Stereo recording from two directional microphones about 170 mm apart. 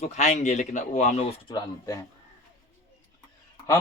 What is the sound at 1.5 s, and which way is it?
Speech, 20° left (ahead or behind).